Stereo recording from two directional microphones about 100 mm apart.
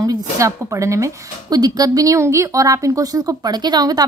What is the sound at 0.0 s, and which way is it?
A woman's voice, 35° right (ahead or behind).